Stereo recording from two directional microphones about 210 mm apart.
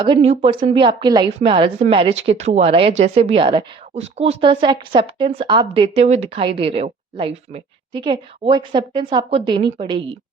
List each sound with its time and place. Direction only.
0.0 s a woman's voice: 25° right (ahead or behind)